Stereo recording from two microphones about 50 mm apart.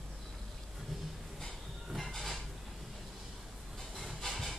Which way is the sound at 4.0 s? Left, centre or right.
Centre.